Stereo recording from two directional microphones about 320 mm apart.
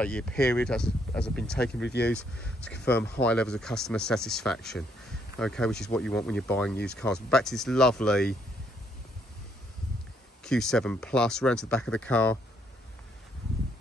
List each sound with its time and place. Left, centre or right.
0.0 s speech: centre
1.8 s speech: left
2.0 s speech: centre
10.4 s speech: centre